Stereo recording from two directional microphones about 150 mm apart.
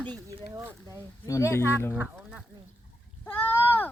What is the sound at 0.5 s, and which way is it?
Speech, 20° right (ahead or behind).